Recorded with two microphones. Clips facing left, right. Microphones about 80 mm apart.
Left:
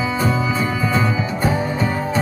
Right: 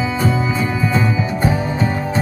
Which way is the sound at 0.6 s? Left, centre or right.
Right.